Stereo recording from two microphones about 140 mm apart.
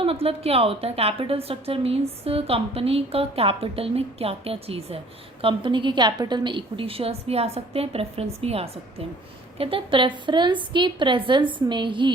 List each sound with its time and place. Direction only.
0.0 s a woman's voice: 40° right (ahead or behind)